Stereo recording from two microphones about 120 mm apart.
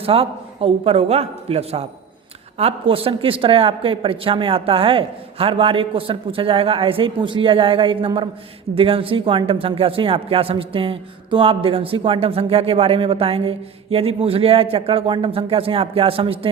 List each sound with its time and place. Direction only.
0.0 s speech: 55° right (ahead or behind)